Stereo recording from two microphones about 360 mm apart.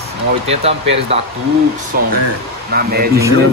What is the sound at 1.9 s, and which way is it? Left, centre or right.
Speech, right.